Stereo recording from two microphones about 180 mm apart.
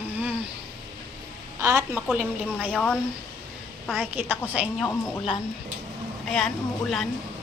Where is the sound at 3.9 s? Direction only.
10° right (ahead or behind).